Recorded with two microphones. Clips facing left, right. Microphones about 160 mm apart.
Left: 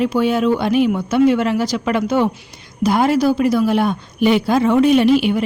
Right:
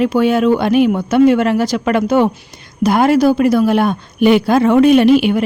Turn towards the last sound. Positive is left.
turn(degrees=-60)  # may be behind; listen again after turning